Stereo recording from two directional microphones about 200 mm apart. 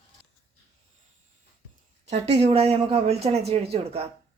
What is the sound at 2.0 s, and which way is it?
Speech, 30° right (ahead or behind).